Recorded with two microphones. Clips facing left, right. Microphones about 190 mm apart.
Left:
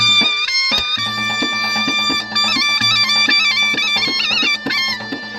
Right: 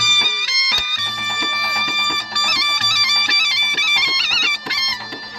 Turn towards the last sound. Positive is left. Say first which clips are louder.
# left 7 dB
turn(degrees=55)  # may be behind; listen again after turning